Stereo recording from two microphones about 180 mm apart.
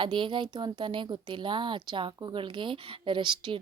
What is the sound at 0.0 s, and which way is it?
Speech, 25° right (ahead or behind).